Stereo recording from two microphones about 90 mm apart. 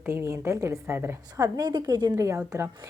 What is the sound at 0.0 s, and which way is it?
A woman's voice, 25° right (ahead or behind).